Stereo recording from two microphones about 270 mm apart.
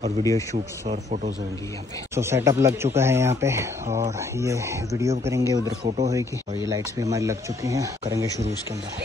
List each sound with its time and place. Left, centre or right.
0.2 s speech: centre
0.8 s speech: right
2.1 s speech: centre
5.9 s speech: right
6.7 s speech: centre